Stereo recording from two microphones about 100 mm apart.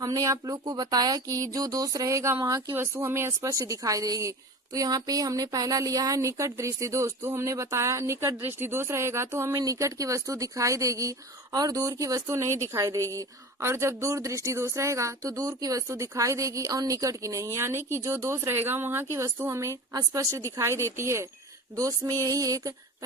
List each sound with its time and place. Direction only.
0.0 s speech: 35° right (ahead or behind)
2.7 s speech: 25° right (ahead or behind)